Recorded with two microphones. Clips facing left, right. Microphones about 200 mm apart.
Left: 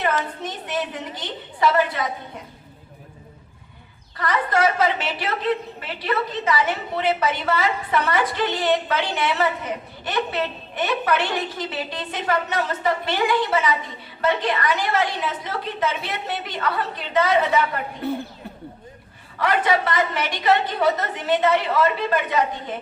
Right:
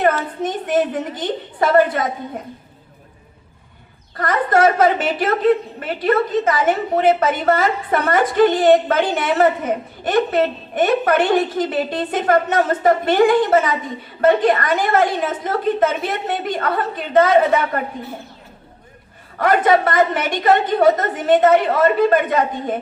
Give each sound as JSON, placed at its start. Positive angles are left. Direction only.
{"t": 0.4, "sound": "a woman's voice", "side_deg": -50}
{"t": 4.2, "sound": "a woman's voice", "side_deg": -50}
{"t": 19.4, "sound": "a woman's voice", "side_deg": -45}